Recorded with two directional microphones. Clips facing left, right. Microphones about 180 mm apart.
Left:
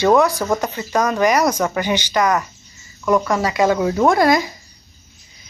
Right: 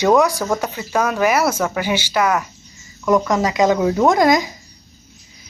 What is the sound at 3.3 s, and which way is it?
Speech, 15° right (ahead or behind).